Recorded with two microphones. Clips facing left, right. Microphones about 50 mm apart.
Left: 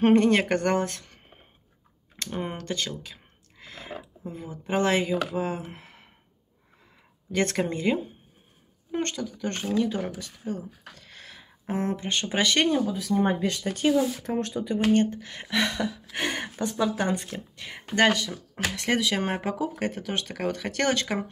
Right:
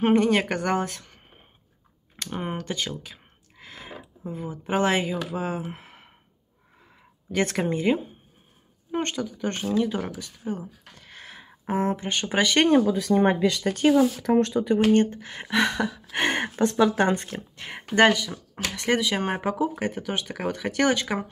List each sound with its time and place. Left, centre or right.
0.0 s speech: centre
2.2 s speech: centre
7.3 s speech: centre
10.4 s a sound: right
12.1 s speech: centre
12.8 s speech: right
13.9 s speech: right
14.7 s speech: right
16.2 s speech: right
16.6 s speech: right
17.7 s speech: centre
18.1 s speech: centre